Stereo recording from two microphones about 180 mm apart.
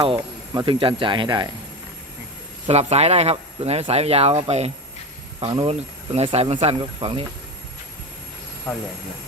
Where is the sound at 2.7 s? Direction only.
35° right (ahead or behind).